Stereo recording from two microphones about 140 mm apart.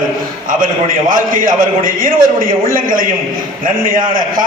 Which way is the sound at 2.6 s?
80° right.